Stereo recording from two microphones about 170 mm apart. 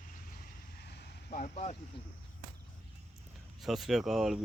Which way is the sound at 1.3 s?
40° left (ahead or behind).